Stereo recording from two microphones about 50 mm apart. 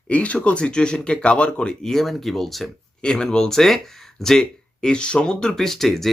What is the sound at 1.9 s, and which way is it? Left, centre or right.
Speech, centre.